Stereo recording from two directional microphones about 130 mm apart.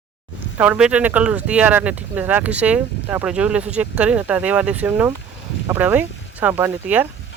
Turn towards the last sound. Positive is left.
turn(degrees=-15)  # may be behind; listen again after turning